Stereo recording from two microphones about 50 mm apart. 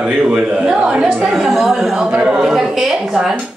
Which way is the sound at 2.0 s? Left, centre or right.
Centre.